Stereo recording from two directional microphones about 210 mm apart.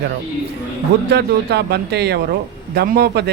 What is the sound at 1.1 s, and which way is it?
Speech, 50° right (ahead or behind).